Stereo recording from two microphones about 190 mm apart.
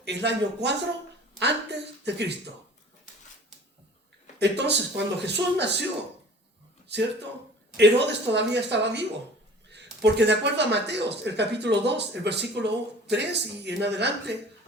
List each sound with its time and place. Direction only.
0.0 s speech: 65° right (ahead or behind)
4.4 s speech: 65° right (ahead or behind)
6.8 s speech: 65° right (ahead or behind)